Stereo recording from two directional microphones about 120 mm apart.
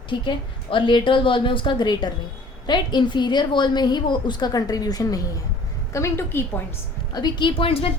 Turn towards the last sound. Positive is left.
turn(degrees=50)  # may be behind; listen again after turning